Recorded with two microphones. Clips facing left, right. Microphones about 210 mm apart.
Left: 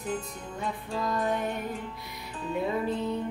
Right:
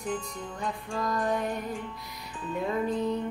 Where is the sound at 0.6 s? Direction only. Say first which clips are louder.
Even; centre (ahead or behind).